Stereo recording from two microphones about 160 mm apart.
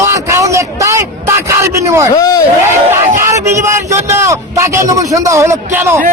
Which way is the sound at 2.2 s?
25° left (ahead or behind).